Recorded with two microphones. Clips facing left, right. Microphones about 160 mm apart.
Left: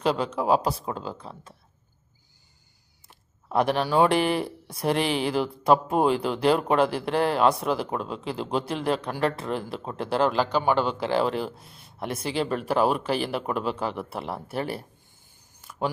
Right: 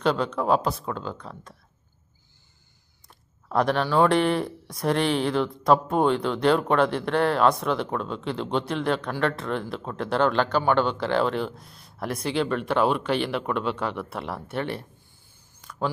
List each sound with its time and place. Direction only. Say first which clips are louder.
0.0 s speech: right 1 dB; 5° left (ahead or behind)
0.9 s speech: right 1 dB; 30° left (ahead or behind)
3.1 s speech: even; 5° left (ahead or behind)
4.4 s speech: right 1 dB; 30° left (ahead or behind)
4.9 s speech: right 1 dB; 5° left (ahead or behind)
11.6 s a sound: right 1 dB; centre (ahead or behind)
12.2 s speech: right 2 dB; 5° left (ahead or behind)